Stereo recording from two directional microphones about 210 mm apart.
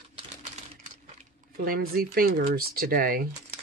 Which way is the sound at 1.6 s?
45° right (ahead or behind).